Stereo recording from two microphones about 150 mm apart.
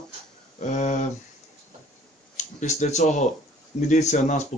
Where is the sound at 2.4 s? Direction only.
55° left (ahead or behind).